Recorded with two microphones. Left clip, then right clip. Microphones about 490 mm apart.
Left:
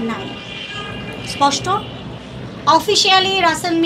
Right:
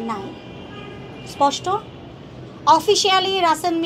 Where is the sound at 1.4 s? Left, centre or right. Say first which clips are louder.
Left 3 dB; right.